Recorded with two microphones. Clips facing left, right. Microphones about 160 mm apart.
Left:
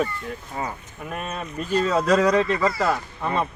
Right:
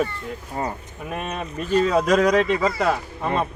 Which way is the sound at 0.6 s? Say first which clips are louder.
Right 3 dB; 45° right (ahead or behind).